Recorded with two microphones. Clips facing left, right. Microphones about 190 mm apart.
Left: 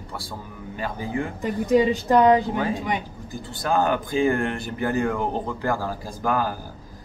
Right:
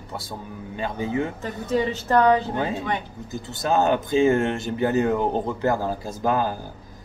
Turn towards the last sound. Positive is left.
turn(degrees=-20)  # may be behind; listen again after turning